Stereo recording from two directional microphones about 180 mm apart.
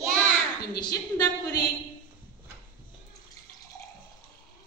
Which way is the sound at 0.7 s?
20° left (ahead or behind).